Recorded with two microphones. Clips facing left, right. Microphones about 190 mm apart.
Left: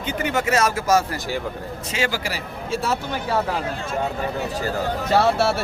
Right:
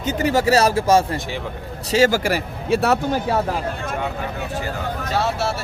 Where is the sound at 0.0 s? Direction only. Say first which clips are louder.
Right 5 dB; 40° right (ahead or behind).